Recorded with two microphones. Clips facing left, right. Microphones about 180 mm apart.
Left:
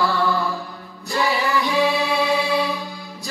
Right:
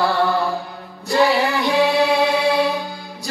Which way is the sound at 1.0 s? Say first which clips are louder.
Right 6 dB; 65° right (ahead or behind).